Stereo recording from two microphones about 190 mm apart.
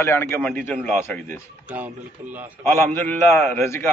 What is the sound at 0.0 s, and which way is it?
A man's voice, 10° left (ahead or behind).